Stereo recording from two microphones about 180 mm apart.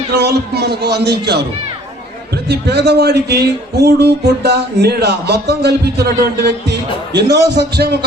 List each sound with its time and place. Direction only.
0.1 s a man's voice: 65° right (ahead or behind)
2.5 s a man's voice: 65° right (ahead or behind)